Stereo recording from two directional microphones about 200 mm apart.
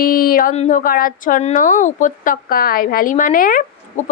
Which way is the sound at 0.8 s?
45° left (ahead or behind).